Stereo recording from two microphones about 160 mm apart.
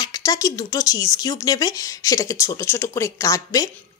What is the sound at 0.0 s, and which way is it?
Speech, 25° left (ahead or behind).